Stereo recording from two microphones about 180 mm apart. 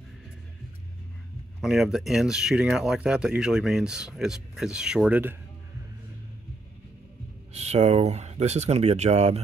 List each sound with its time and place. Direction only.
1.6 s speech: centre (ahead or behind)
7.5 s speech: 35° right (ahead or behind)